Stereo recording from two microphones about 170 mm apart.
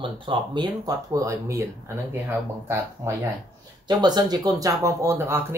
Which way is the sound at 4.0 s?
25° right (ahead or behind).